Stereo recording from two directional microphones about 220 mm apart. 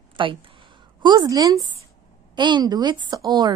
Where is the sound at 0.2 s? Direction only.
20° right (ahead or behind).